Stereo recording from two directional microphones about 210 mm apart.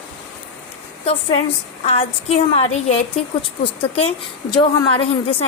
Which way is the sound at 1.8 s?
30° left (ahead or behind).